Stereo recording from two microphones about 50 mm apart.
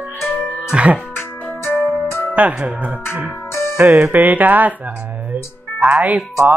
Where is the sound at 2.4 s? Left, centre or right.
Right.